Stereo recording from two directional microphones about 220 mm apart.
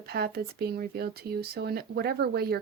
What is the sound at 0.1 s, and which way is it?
Speech, 45° right (ahead or behind).